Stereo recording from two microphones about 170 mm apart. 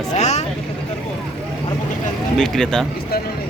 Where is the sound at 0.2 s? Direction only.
40° left (ahead or behind).